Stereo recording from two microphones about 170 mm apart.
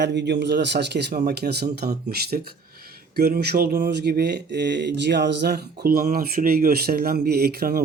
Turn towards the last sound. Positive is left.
turn(degrees=-65)  # may be behind; listen again after turning